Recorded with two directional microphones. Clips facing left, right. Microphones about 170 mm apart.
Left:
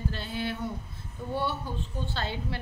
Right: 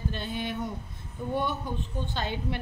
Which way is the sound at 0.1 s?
20° right (ahead or behind).